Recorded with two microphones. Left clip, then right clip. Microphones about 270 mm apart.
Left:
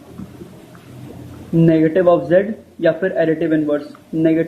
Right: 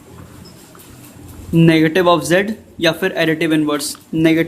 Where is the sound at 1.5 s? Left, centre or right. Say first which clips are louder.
Right 1 dB; right.